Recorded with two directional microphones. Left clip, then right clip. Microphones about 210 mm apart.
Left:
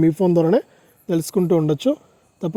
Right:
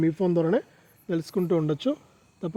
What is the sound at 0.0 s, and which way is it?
Speech, 35° left (ahead or behind).